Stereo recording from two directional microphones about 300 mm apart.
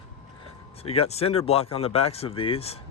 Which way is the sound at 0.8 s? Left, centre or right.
Centre.